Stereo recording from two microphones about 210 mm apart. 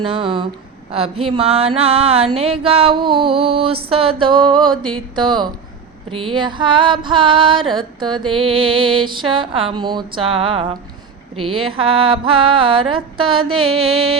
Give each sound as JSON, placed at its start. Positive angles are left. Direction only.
{"t": 0.0, "sound": "music", "side_deg": -25}
{"t": 0.9, "sound": "a woman's voice", "side_deg": -25}
{"t": 1.2, "sound": "music", "side_deg": -25}
{"t": 13.7, "sound": "mantra", "side_deg": -85}